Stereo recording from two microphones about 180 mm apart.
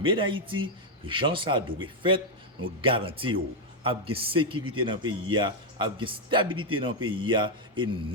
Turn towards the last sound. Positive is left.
turn(degrees=-30)  # may be behind; listen again after turning